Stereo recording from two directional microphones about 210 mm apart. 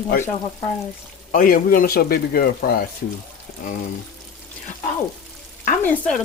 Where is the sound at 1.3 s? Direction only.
40° left (ahead or behind).